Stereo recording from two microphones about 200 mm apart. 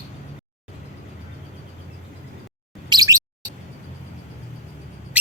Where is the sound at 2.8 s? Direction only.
20° right (ahead or behind).